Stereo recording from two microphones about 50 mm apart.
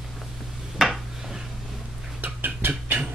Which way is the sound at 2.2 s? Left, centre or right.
Right.